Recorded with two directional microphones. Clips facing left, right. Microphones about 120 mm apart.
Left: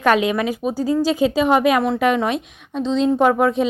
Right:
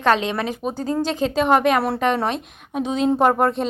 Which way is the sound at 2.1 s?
35° right (ahead or behind).